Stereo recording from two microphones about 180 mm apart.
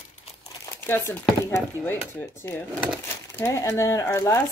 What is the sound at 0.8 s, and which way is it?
Speech, 10° left (ahead or behind).